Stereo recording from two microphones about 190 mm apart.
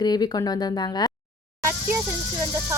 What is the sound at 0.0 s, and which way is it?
Speech, 20° left (ahead or behind).